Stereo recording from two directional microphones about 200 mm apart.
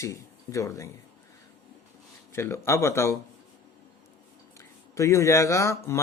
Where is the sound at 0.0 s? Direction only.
15° left (ahead or behind).